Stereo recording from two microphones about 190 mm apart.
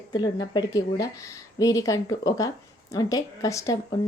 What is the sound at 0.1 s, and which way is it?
A woman's voice, 20° left (ahead or behind).